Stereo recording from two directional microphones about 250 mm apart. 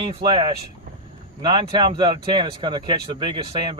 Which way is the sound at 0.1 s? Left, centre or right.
Centre.